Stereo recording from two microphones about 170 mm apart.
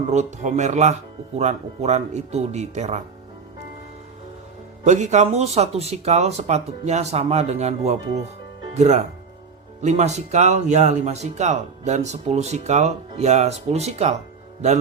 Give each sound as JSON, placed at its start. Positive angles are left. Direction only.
{"t": 0.1, "sound": "speech", "side_deg": -45}
{"t": 4.8, "sound": "speech", "side_deg": -45}